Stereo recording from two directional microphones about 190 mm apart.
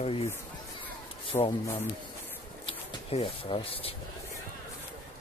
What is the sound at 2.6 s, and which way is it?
Speech, 30° left (ahead or behind).